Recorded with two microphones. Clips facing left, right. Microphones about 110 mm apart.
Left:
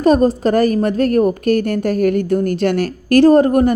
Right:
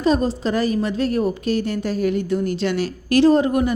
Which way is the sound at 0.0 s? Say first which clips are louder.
Left 6 dB; 50° left (ahead or behind).